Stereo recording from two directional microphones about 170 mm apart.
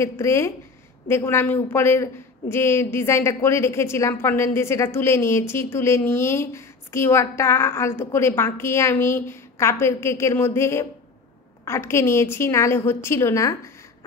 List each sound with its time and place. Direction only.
0.0 s a woman's voice: 15° left (ahead or behind)